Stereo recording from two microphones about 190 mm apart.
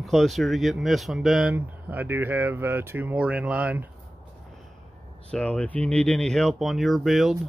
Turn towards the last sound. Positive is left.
turn(degrees=0)  # may be behind; listen again after turning